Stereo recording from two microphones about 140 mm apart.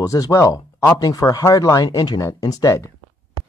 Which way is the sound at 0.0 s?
25° left (ahead or behind).